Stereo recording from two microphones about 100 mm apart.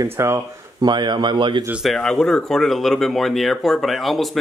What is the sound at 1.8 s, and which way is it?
Speech, 5° left (ahead or behind).